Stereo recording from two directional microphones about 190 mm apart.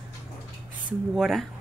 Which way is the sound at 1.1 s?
Centre (ahead or behind).